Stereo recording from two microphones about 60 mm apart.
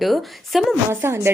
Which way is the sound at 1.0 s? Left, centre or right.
Right.